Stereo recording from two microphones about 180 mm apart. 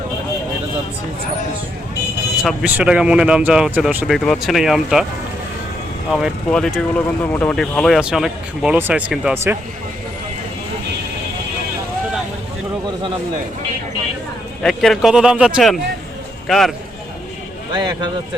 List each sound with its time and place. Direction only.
2.4 s speech: centre (ahead or behind)
6.1 s speech: centre (ahead or behind)
14.6 s speech: 5° left (ahead or behind)
17.7 s speech: 25° right (ahead or behind)